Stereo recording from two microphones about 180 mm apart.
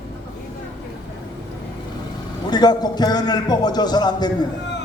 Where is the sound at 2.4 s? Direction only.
25° left (ahead or behind).